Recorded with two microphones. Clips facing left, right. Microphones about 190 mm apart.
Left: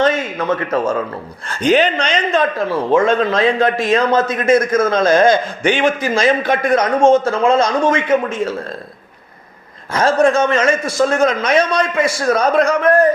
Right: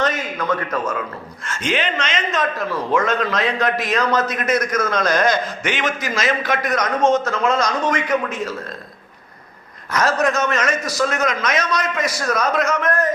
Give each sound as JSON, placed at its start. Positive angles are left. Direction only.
{"t": 0.0, "sound": "a man's voice", "side_deg": 25}
{"t": 9.9, "sound": "a man's voice", "side_deg": 30}